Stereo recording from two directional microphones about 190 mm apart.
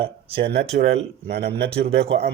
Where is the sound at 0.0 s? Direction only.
30° right (ahead or behind).